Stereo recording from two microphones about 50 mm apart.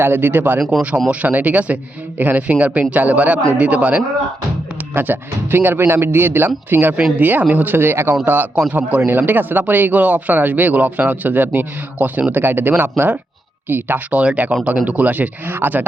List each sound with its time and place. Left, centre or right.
0.0 s speech: right
0.8 s speech: right
4.9 s speech: right
14.1 s speech: right